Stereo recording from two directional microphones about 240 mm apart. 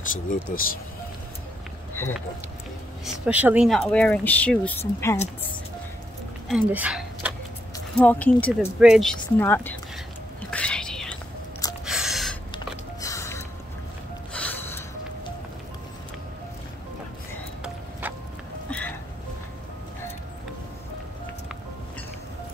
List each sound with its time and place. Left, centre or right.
0.1 s speech: left
2.0 s speech: centre
3.3 s speech: centre
6.5 s speech: centre
7.7 s speech: centre
10.5 s whispering: centre
11.8 s a sound: centre
13.0 s music: centre
14.3 s a sound: centre
18.0 s music: centre
18.7 s music: centre